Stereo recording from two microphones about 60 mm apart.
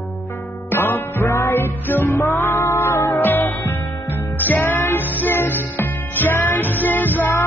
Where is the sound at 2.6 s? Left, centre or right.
Left.